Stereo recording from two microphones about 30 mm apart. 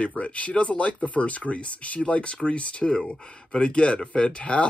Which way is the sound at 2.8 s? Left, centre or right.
Left.